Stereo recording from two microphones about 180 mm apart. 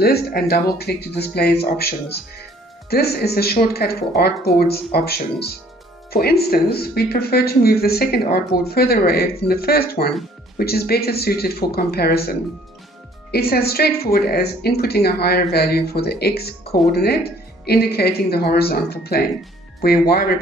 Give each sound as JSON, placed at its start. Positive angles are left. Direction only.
{"t": 0.0, "sound": "a woman's voice", "side_deg": 60}